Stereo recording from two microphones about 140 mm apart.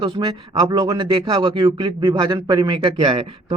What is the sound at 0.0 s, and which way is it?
Speech, 35° right (ahead or behind).